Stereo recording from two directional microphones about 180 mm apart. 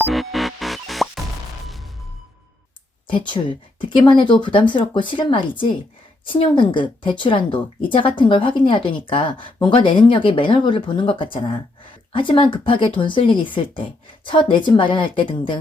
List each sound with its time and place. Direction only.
0.0 s music: centre (ahead or behind)
3.1 s speech: 25° left (ahead or behind)